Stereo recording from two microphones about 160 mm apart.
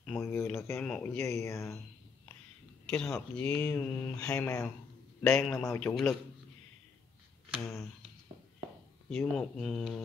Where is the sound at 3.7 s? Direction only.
15° left (ahead or behind).